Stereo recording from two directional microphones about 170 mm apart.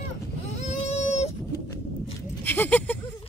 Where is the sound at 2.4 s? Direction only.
10° left (ahead or behind).